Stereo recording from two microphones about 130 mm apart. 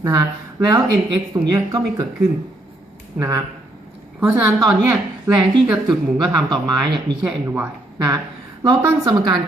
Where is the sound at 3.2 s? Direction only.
30° right (ahead or behind).